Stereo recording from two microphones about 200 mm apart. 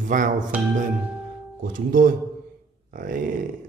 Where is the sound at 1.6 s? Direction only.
45° right (ahead or behind).